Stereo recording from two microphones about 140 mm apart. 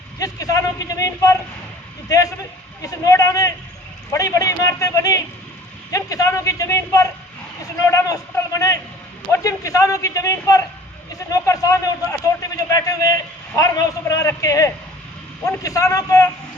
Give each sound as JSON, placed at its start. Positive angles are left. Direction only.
{"t": 0.2, "sound": "a man's voice", "side_deg": 25}